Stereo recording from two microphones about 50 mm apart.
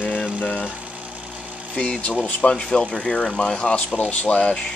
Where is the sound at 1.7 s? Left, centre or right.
Left.